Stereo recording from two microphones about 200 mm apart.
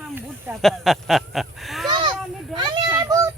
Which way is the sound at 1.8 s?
20° right (ahead or behind).